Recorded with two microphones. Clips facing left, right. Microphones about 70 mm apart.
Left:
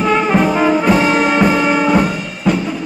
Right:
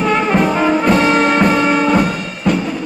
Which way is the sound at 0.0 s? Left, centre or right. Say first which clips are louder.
Left 1 dB; centre.